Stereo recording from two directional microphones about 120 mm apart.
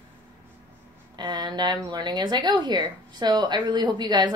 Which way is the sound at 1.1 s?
40° right (ahead or behind).